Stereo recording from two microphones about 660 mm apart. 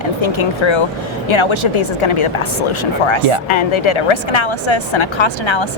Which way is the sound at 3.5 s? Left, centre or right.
Left.